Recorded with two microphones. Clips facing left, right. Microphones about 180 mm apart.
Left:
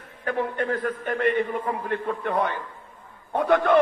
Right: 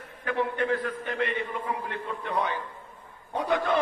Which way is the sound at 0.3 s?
45° left (ahead or behind).